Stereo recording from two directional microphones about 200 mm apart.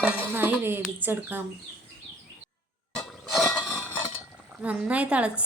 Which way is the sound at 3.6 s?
10° left (ahead or behind).